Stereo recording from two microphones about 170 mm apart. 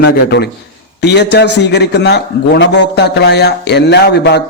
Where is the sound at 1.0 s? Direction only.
85° left.